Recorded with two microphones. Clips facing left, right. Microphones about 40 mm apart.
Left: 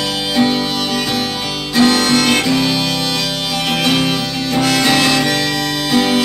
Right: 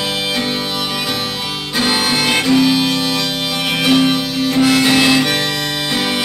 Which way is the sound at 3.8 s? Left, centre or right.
Centre.